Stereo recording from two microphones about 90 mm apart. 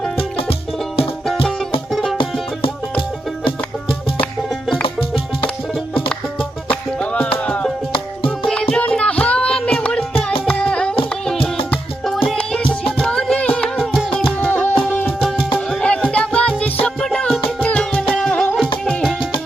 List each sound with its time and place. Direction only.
1.9 s music: centre (ahead or behind)
4.4 s music: 5° right (ahead or behind)
4.8 s music: 90° left
6.7 s music: 15° left (ahead or behind)
8.7 s music: 10° left (ahead or behind)
12.0 s music: centre (ahead or behind)
13.7 s music: 5° right (ahead or behind)
14.3 s music: 20° left (ahead or behind)
15.2 s music: 5° right (ahead or behind)
15.7 s music: 10° left (ahead or behind)